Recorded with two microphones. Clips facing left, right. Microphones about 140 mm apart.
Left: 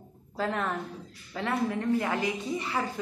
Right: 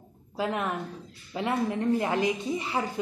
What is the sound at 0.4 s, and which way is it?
A woman's voice, 15° right (ahead or behind).